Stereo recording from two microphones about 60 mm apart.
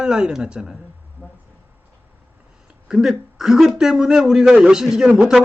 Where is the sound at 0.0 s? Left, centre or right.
Centre.